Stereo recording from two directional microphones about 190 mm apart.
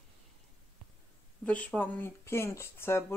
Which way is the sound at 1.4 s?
5° left (ahead or behind).